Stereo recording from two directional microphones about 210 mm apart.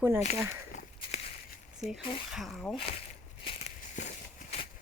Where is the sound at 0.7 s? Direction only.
35° left (ahead or behind).